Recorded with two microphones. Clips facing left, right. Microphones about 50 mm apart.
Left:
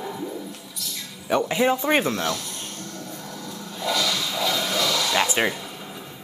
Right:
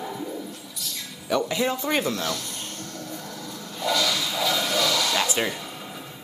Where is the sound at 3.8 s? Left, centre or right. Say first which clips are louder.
Even; centre.